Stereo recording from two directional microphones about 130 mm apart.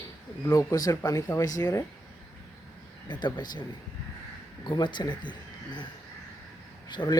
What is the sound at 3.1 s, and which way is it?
A man's voice, 35° left (ahead or behind).